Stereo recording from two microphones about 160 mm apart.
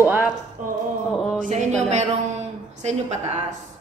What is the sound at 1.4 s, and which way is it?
A woman's voice, 50° right (ahead or behind).